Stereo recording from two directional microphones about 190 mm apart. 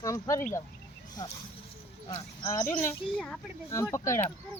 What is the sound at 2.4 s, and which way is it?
Speech, 15° left (ahead or behind).